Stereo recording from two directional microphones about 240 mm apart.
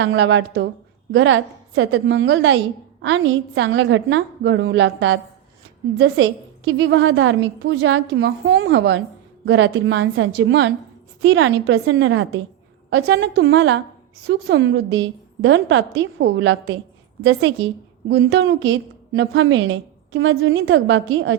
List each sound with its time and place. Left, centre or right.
0.0 s a woman's voice: right
6.7 s a woman's voice: right
18.1 s a woman's voice: right